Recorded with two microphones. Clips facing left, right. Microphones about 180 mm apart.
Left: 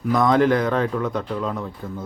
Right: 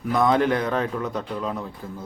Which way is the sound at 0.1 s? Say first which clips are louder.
Left 3 dB; 5° right (ahead or behind).